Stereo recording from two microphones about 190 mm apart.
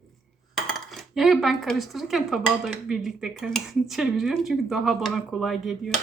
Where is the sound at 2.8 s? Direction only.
5° right (ahead or behind).